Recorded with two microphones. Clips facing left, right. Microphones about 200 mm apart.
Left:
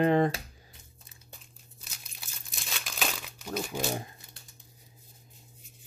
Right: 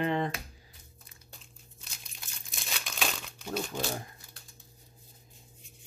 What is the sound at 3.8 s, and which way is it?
Speech, 20° left (ahead or behind).